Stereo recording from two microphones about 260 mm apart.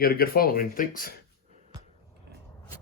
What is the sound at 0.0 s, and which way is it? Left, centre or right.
Speech, left.